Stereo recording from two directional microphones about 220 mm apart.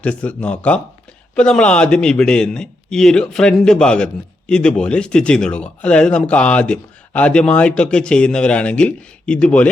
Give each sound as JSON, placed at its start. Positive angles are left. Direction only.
{"t": 0.0, "sound": "a man's voice", "side_deg": 5}